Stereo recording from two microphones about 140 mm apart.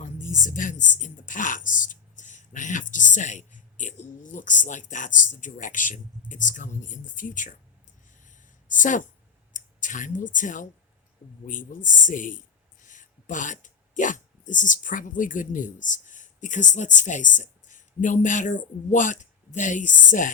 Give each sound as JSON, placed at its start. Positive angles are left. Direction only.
{"t": 0.0, "sound": "a woman's voice", "side_deg": 60}
{"t": 8.2, "sound": "a sound", "side_deg": 65}
{"t": 9.5, "sound": "speech", "side_deg": 65}